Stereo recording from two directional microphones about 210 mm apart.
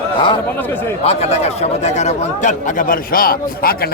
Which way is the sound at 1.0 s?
30° left (ahead or behind).